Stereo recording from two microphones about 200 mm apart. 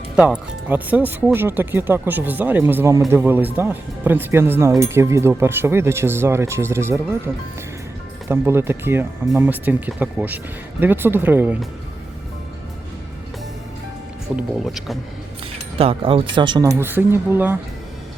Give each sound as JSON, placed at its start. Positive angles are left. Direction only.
{"t": 0.2, "sound": "speech", "side_deg": -5}
{"t": 8.3, "sound": "speech", "side_deg": -10}
{"t": 14.3, "sound": "speech", "side_deg": 0}
{"t": 15.8, "sound": "speech", "side_deg": -30}